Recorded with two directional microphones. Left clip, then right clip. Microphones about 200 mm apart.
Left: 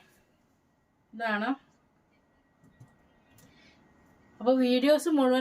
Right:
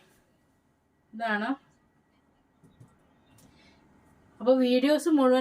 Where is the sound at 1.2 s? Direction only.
10° left (ahead or behind).